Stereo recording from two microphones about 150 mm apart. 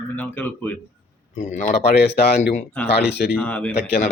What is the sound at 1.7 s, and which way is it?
Speech, 90° left.